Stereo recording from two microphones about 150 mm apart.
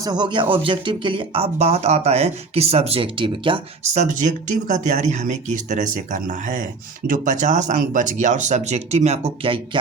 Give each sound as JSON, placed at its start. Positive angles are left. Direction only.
{"t": 0.0, "sound": "speech", "side_deg": -30}
{"t": 3.8, "sound": "speech", "side_deg": -50}